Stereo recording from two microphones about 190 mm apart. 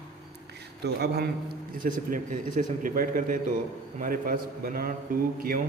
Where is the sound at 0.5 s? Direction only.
60° right (ahead or behind).